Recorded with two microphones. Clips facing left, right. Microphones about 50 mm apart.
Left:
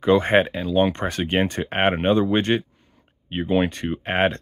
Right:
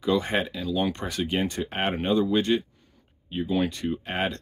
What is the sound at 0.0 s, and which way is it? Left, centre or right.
Speech, left.